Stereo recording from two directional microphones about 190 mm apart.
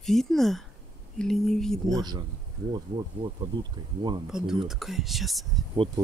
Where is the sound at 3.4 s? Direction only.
20° right (ahead or behind).